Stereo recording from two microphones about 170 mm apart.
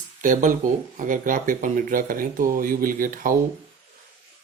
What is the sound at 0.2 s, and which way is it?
Speech, 50° right (ahead or behind).